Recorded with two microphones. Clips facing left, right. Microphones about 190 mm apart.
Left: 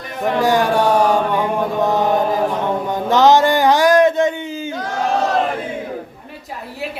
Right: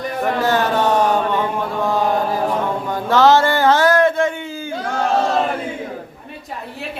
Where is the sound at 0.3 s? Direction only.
15° left (ahead or behind).